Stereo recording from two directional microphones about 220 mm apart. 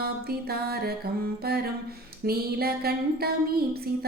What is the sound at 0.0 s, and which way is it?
Female singing, 45° right (ahead or behind).